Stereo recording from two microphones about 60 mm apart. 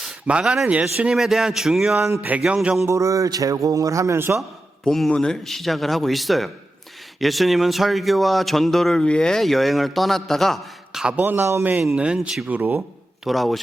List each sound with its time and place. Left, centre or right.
0.3 s speech: centre
1.1 s speech: centre
2.3 s speech: right
2.8 s speech: right
4.9 s speech: centre
11.2 s speech: right
11.9 s speech: centre
12.5 s speech: right
13.2 s speech: centre